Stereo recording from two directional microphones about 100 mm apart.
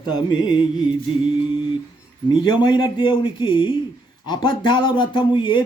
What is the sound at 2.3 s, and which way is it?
A man's voice, 50° left (ahead or behind).